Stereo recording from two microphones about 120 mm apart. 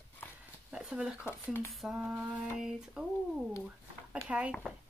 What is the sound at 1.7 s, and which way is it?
Speech, centre (ahead or behind).